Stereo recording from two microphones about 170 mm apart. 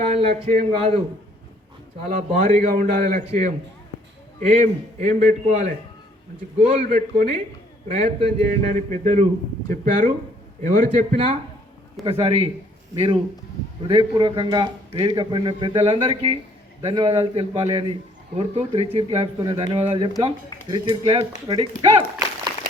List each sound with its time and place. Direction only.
0.0 s a man's voice: 35° right (ahead or behind)
2.3 s a man's voice: 45° right (ahead or behind)
3.2 s a man's voice: 40° right (ahead or behind)
8.4 s a man's voice: 45° right (ahead or behind)
12.0 s a man's voice: 35° right (ahead or behind)